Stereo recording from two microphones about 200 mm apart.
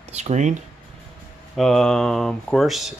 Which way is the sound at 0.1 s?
35° right (ahead or behind).